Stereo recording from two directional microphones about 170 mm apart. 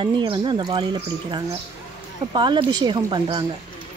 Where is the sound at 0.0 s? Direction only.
30° right (ahead or behind).